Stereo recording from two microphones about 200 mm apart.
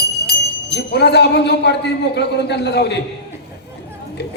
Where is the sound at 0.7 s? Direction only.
55° left (ahead or behind).